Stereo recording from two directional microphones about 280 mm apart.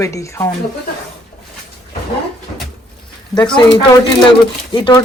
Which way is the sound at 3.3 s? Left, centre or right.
Centre.